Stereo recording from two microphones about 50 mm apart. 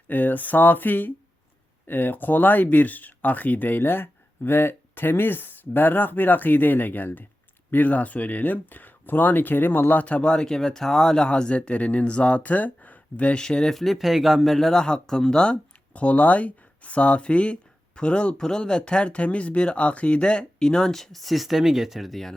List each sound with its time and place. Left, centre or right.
0.1 s speech: left
13.4 s speech: centre
13.7 s speech: centre